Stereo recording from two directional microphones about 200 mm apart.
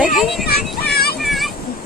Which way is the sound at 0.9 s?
50° left (ahead or behind).